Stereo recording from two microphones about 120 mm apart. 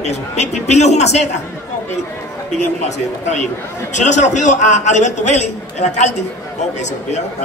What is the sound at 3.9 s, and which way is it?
A man's voice, 80° left.